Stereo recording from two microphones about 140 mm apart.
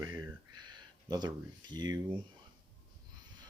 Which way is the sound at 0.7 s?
30° right (ahead or behind).